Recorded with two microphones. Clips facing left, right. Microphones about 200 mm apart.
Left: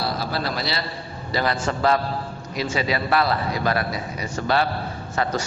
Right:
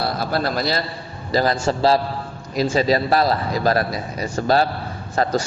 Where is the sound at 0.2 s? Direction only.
50° right (ahead or behind).